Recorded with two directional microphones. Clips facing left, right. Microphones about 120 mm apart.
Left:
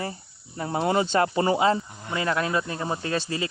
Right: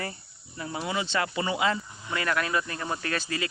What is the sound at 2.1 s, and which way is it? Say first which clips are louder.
Speech: left 3 dB; 25° left (ahead or behind).